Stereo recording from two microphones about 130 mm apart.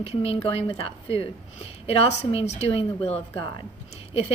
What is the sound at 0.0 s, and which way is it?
A woman's voice, 50° left (ahead or behind).